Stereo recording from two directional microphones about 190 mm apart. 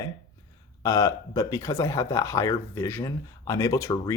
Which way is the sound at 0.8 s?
15° left (ahead or behind).